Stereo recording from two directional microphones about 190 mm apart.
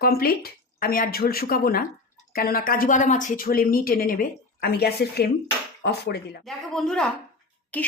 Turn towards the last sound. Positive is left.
turn(degrees=10)  # may be behind; listen again after turning